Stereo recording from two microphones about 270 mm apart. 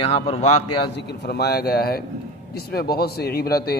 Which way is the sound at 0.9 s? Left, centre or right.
Left.